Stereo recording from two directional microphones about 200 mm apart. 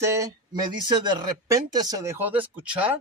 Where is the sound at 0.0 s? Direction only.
15° right (ahead or behind).